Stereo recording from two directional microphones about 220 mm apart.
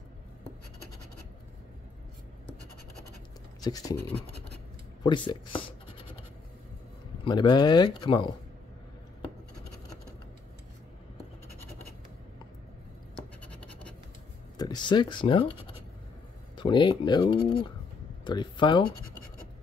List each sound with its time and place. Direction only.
3.6 s speech: 15° left (ahead or behind)
5.0 s speech: 20° left (ahead or behind)
7.2 s speech: 20° left (ahead or behind)
13.4 s scratch: 5° left (ahead or behind)
14.6 s speech: 20° left (ahead or behind)
16.5 s speech: 20° left (ahead or behind)